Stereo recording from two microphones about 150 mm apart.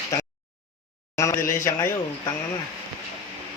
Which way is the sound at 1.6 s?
20° left (ahead or behind).